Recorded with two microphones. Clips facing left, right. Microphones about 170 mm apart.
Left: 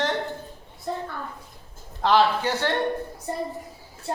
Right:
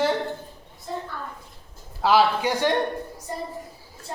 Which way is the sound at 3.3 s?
60° left (ahead or behind).